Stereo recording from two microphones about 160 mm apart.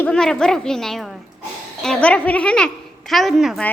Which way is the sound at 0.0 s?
5° left (ahead or behind).